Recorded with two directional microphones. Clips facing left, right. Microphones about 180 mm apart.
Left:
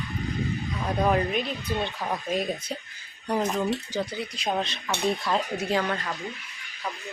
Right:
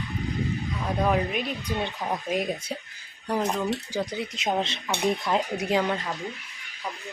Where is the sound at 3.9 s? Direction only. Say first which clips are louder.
Right 1 dB; 20° right (ahead or behind).